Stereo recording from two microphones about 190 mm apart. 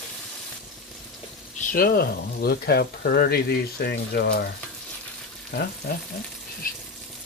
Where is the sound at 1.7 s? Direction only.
50° left (ahead or behind).